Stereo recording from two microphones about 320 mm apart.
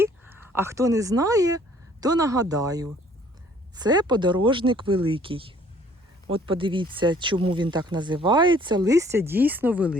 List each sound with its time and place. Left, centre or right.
0.0 s speech: centre